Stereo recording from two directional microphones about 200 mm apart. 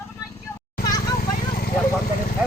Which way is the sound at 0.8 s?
20° left (ahead or behind).